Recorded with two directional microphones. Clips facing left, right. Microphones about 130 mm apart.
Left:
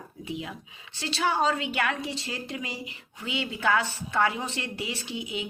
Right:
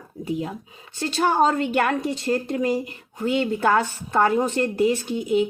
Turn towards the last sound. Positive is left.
turn(degrees=-45)  # may be behind; listen again after turning